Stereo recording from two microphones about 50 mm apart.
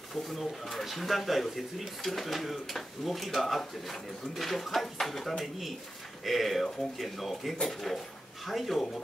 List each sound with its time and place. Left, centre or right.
0.1 s speech: centre